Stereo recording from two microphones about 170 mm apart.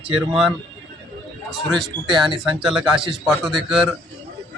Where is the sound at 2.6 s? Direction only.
5° right (ahead or behind).